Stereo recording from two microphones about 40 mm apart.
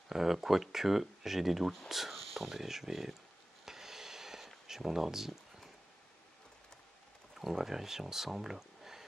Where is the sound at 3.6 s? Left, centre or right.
Centre.